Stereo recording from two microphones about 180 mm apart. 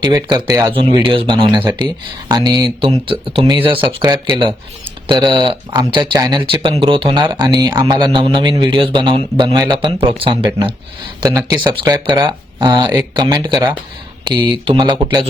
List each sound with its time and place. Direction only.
0.0 s speech: 25° right (ahead or behind)
0.7 s speech: 30° right (ahead or behind)